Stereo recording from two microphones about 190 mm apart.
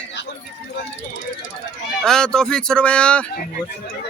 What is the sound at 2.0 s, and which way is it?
Speech, 5° left (ahead or behind).